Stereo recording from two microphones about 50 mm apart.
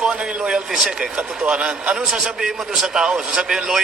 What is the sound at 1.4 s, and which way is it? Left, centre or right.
A man's voice, right.